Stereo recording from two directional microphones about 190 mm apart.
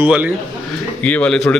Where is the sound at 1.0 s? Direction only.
5° left (ahead or behind).